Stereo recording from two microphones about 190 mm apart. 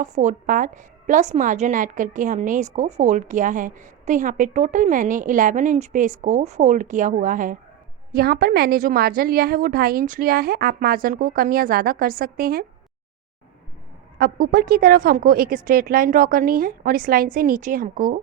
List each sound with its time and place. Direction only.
0.0 s a woman's voice: 40° right (ahead or behind)
8.1 s a woman's voice: 55° right (ahead or behind)
14.2 s a woman's voice: 55° right (ahead or behind)